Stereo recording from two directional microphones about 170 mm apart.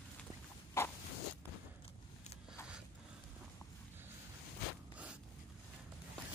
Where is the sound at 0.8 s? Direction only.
15° left (ahead or behind).